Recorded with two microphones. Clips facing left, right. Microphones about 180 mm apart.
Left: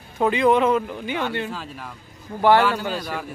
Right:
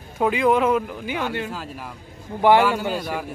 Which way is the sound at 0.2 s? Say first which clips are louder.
Left 1 dB; 5° right (ahead or behind).